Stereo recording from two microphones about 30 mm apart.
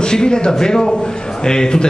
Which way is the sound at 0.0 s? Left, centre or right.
Left.